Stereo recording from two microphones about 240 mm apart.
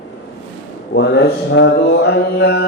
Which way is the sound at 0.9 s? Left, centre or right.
Left.